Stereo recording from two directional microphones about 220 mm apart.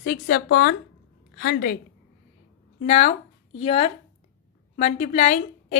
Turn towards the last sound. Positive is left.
turn(degrees=35)  # may be behind; listen again after turning